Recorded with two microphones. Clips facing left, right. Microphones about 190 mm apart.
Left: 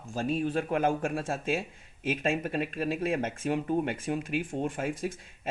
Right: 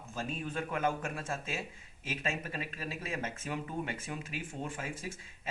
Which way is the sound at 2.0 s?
55° left (ahead or behind).